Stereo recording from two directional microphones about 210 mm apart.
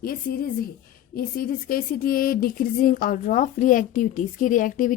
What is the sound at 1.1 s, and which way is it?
A woman's voice, 45° left (ahead or behind).